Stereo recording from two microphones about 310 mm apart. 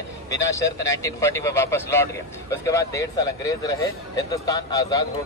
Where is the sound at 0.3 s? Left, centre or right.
Centre.